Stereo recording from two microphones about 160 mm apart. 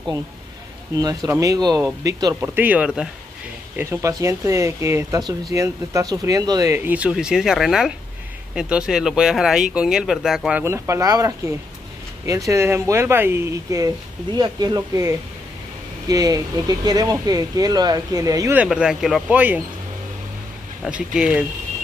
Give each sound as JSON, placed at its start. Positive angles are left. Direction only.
{"t": 0.9, "sound": "speech", "side_deg": -20}
{"t": 2.4, "sound": "speech", "side_deg": -10}
{"t": 10.6, "sound": "speech", "side_deg": -15}
{"t": 18.6, "sound": "speech", "side_deg": -5}
{"t": 21.1, "sound": "speech", "side_deg": -5}